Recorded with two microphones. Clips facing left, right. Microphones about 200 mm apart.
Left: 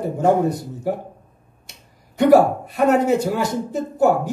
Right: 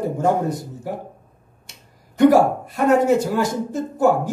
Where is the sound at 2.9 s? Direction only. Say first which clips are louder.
Right 2 dB; 60° left (ahead or behind).